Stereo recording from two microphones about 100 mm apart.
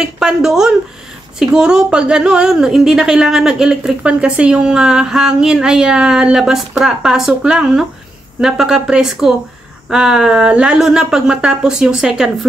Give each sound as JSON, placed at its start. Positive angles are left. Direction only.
{"t": 0.0, "sound": "a woman's voice", "side_deg": -5}